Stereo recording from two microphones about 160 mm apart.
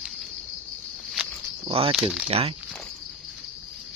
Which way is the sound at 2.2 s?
40° right (ahead or behind).